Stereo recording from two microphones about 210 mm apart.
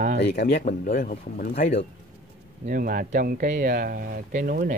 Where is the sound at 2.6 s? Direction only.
40° right (ahead or behind).